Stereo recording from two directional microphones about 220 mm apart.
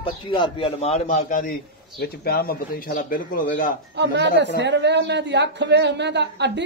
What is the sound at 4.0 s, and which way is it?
A man's voice, 50° right (ahead or behind).